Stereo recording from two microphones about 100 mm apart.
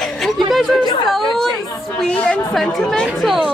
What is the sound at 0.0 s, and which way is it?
Chatter, centre (ahead or behind).